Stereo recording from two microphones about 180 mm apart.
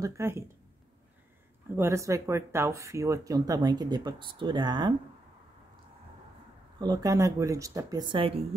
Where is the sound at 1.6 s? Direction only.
15° right (ahead or behind).